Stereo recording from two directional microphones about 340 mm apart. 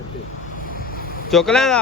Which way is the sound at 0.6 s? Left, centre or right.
Left.